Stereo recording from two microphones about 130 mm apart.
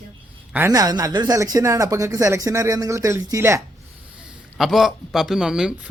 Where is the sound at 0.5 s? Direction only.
25° right (ahead or behind).